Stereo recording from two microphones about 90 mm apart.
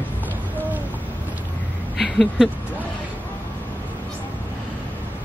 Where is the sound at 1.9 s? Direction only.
5° right (ahead or behind).